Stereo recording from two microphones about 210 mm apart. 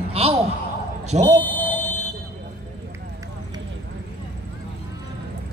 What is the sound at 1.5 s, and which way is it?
Buzzer, 35° left (ahead or behind).